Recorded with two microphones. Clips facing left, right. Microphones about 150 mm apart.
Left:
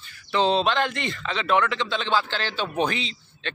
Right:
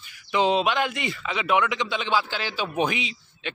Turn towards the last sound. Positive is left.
turn(degrees=-10)  # may be behind; listen again after turning